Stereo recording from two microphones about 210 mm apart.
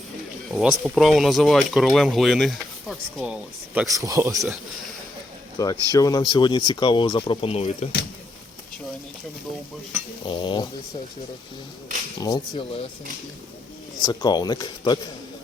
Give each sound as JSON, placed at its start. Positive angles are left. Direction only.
{"t": 0.5, "sound": "speech", "side_deg": 0}
{"t": 3.8, "sound": "speech", "side_deg": -15}
{"t": 5.5, "sound": "speech", "side_deg": 20}
{"t": 10.2, "sound": "speech", "side_deg": 25}
{"t": 12.2, "sound": "speech", "side_deg": 20}
{"t": 14.0, "sound": "speech", "side_deg": 20}